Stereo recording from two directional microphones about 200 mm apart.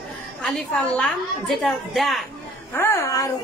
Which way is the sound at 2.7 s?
15° left (ahead or behind).